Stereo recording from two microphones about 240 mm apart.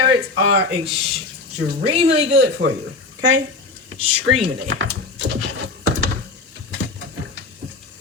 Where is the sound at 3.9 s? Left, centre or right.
Right.